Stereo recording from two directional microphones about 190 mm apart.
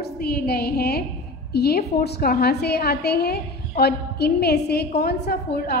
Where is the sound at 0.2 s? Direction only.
55° left (ahead or behind).